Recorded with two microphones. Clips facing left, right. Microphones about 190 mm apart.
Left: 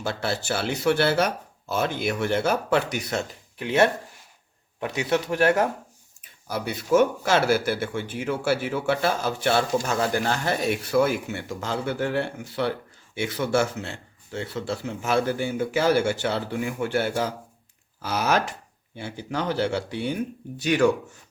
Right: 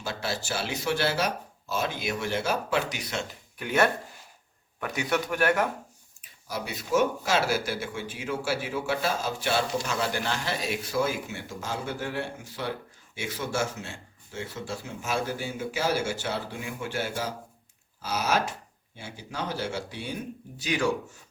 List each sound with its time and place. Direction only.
0.0 s a man's voice: 60° left (ahead or behind)
3.6 s speech: 25° left (ahead or behind)
6.5 s a man's voice: 55° left (ahead or behind)